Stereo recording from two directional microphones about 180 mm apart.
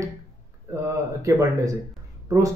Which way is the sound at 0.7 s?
15° right (ahead or behind).